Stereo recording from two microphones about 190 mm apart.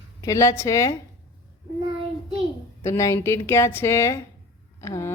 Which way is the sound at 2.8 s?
15° left (ahead or behind).